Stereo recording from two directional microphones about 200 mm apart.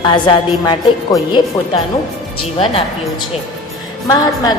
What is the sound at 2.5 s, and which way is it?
Speech, 30° left (ahead or behind).